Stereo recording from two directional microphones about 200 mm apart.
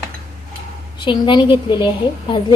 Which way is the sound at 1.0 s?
25° left (ahead or behind).